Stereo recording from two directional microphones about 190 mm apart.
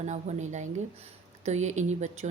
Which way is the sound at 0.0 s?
40° right (ahead or behind).